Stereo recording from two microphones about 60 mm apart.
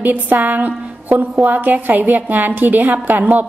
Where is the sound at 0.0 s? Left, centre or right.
Right.